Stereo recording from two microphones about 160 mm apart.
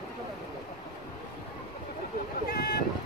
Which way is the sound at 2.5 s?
70° left (ahead or behind).